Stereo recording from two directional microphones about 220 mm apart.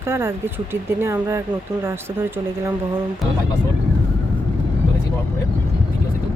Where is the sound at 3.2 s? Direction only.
Centre (ahead or behind).